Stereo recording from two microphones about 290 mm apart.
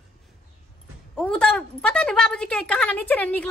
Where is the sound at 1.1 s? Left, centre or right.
Centre.